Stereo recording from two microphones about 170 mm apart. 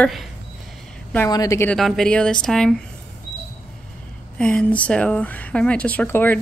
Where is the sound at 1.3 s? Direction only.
20° left (ahead or behind).